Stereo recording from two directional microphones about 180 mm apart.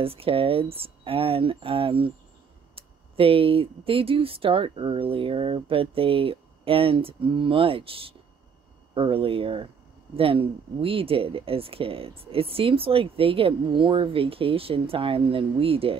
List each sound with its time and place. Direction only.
0.0 s speech: 30° right (ahead or behind)